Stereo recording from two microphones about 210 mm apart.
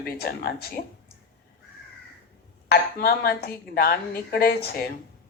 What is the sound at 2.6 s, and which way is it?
A woman's voice, 45° left (ahead or behind).